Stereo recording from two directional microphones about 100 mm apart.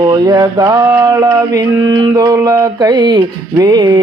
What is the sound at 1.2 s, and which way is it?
Mantra, 40° right (ahead or behind).